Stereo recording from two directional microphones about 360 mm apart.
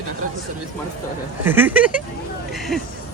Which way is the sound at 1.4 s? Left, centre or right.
Centre.